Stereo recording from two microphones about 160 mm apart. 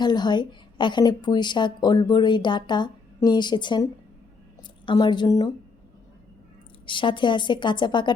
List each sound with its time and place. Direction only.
0.0 s a woman's voice: 25° left (ahead or behind)
4.9 s a woman's voice: 30° left (ahead or behind)
6.8 s a woman's voice: 30° left (ahead or behind)